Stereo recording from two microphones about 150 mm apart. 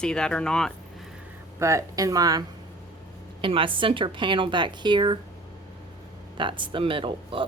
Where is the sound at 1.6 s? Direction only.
20° right (ahead or behind).